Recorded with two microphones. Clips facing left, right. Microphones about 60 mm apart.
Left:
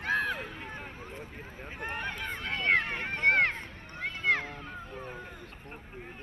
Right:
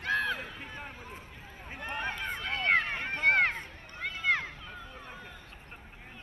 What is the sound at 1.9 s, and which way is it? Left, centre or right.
Run, right.